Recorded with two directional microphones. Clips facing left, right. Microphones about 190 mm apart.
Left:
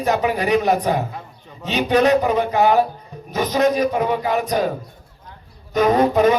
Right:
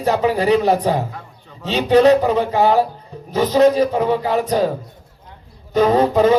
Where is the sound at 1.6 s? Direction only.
15° left (ahead or behind).